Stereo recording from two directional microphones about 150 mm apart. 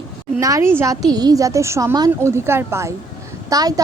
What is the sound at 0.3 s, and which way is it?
A woman's voice, 20° right (ahead or behind).